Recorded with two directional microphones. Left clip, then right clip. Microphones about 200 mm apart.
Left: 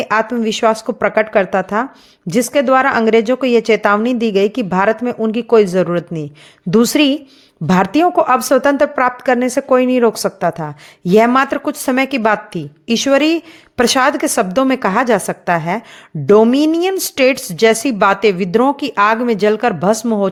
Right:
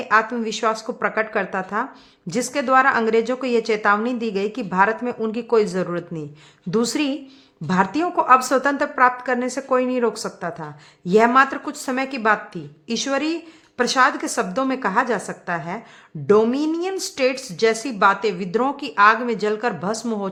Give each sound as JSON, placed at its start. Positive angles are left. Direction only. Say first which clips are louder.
{"t": 0.0, "sound": "a woman's voice", "louder": "left 3 dB", "side_deg": 35}